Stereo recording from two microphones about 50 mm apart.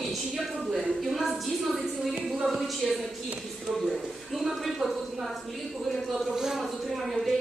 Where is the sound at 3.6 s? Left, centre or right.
Centre.